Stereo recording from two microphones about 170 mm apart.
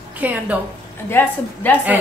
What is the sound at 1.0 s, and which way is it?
Speech, 10° left (ahead or behind).